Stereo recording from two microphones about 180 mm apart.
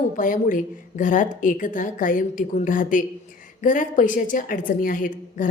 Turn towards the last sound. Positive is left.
turn(degrees=45)  # may be behind; listen again after turning